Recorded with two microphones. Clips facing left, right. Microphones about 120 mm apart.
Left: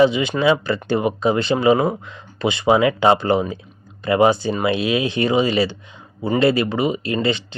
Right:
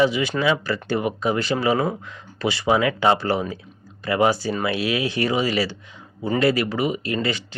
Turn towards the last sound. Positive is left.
turn(degrees=25)  # may be behind; listen again after turning